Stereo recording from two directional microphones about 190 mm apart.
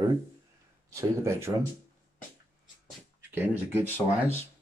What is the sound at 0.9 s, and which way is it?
Speech, 15° right (ahead or behind).